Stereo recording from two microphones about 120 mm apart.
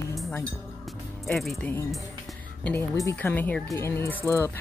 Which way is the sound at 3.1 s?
15° left (ahead or behind).